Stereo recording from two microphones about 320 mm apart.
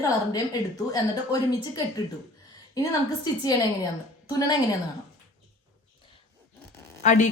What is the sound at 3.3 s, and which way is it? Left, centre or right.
Speech, centre.